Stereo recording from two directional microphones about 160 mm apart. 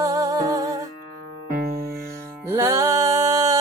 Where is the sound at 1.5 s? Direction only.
70° right (ahead or behind).